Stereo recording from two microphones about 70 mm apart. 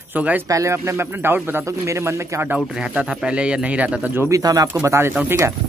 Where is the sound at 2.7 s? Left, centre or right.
Centre; by 5.2 s right.